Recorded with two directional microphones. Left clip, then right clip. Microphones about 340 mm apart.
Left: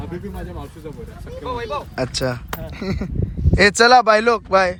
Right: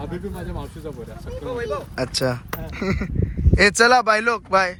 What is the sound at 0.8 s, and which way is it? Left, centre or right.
Speech, centre.